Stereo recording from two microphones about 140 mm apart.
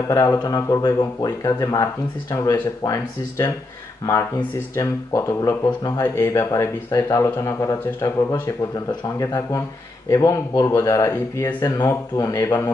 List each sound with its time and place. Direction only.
0.1 s speech: 25° left (ahead or behind)